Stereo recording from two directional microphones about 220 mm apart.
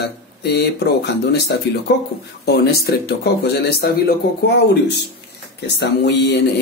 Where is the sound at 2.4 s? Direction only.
45° left (ahead or behind).